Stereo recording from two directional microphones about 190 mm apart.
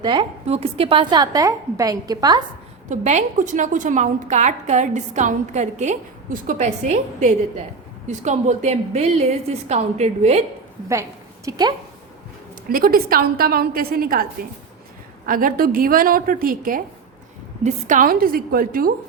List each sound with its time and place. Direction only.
0.0 s a woman's voice: 25° right (ahead or behind)
2.9 s a woman's voice: 40° right (ahead or behind)
8.0 s a woman's voice: 35° right (ahead or behind)
11.4 s a woman's voice: 20° right (ahead or behind)
12.6 s a woman's voice: 50° right (ahead or behind)
15.3 s a woman's voice: 45° right (ahead or behind)